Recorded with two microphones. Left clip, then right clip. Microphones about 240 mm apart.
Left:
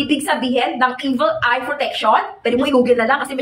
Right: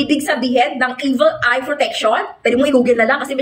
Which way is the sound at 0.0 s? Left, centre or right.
Centre.